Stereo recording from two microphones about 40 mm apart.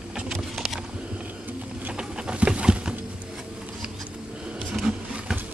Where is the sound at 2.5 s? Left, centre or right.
Right.